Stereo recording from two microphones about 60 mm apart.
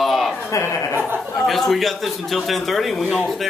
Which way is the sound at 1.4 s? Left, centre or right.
Centre.